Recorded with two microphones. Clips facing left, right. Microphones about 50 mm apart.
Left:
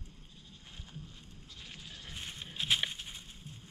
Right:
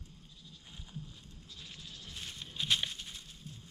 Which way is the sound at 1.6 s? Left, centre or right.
Left.